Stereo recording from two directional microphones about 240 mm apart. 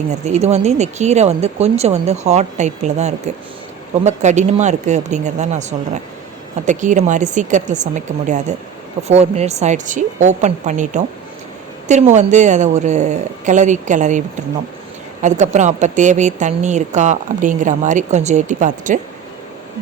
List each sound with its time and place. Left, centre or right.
0.1 s a woman's voice: right
12.1 s a woman's voice: right